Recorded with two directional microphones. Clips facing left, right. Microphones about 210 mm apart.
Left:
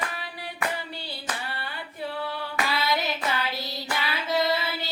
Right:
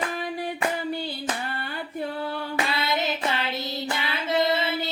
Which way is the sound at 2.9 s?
25° right (ahead or behind).